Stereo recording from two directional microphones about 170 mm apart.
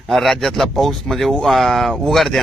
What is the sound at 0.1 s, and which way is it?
Speech, centre (ahead or behind).